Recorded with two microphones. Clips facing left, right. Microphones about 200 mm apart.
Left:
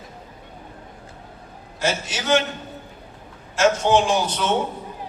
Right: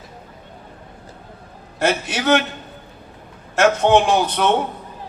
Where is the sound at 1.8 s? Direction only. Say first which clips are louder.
Right 5 dB; 60° right (ahead or behind).